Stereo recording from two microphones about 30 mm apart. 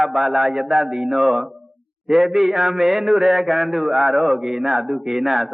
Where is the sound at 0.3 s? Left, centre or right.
Right.